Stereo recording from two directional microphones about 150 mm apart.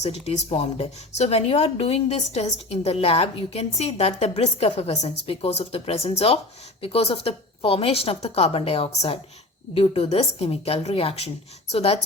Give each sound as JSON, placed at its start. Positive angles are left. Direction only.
{"t": 0.0, "sound": "a woman's voice", "side_deg": 45}